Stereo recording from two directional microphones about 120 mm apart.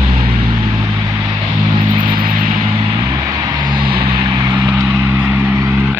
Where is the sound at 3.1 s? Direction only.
30° right (ahead or behind).